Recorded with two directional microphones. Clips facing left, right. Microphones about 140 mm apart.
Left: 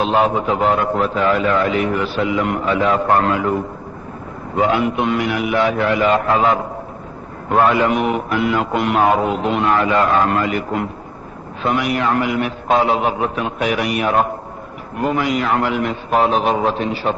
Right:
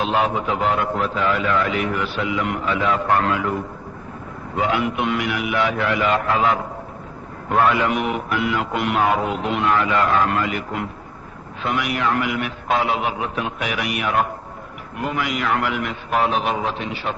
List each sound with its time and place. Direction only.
0.0 s a man's voice: 35° left (ahead or behind)
4.5 s a man's voice: 35° left (ahead or behind)